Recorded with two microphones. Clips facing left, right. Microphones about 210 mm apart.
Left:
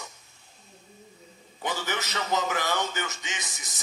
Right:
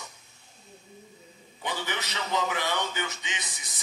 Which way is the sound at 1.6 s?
45° left (ahead or behind).